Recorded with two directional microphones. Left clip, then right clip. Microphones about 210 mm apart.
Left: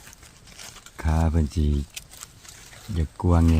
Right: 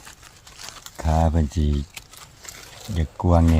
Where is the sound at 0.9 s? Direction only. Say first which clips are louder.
Right 5 dB; 5° left (ahead or behind).